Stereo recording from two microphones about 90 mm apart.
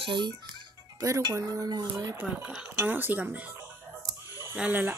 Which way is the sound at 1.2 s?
40° right (ahead or behind).